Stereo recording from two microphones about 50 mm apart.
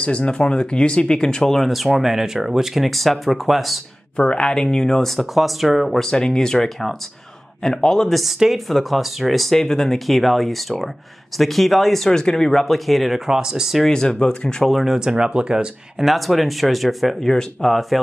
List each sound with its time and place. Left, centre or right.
0.0 s speech: left
1.6 s speech: centre
4.2 s speech: centre
5.1 s speech: centre
5.9 s speech: centre
8.2 s speech: centre
13.3 s speech: centre
13.8 s speech: centre
14.7 s speech: centre
15.0 s speech: centre
16.0 s speech: centre